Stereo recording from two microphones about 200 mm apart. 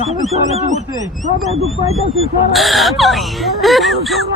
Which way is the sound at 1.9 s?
90° right.